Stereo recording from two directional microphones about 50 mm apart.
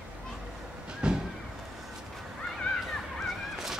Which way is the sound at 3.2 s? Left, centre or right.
Centre.